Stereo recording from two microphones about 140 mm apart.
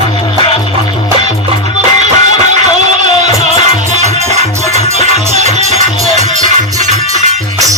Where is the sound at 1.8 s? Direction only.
55° right (ahead or behind).